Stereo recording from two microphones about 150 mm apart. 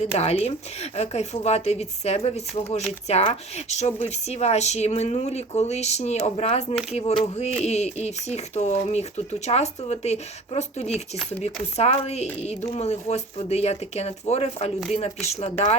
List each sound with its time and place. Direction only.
0.2 s speech: 45° left (ahead or behind)
6.9 s a sound: 40° left (ahead or behind)
7.4 s speech: 50° left (ahead or behind)